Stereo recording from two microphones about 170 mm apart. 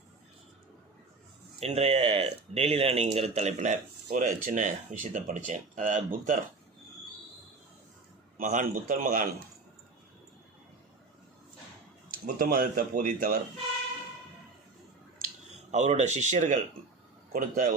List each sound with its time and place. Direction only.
1.5 s speech: 40° right (ahead or behind)
8.4 s speech: 50° right (ahead or behind)
12.2 s speech: 60° right (ahead or behind)
15.7 s speech: 40° right (ahead or behind)